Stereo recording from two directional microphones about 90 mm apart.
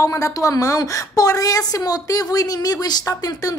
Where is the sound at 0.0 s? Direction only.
35° left (ahead or behind).